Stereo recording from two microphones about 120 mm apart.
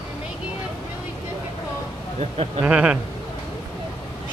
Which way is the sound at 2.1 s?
55° right (ahead or behind).